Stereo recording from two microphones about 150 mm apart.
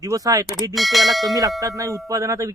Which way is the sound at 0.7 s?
Centre (ahead or behind).